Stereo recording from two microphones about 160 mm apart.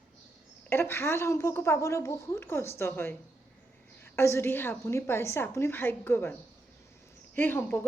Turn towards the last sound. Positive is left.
turn(degrees=10)  # may be behind; listen again after turning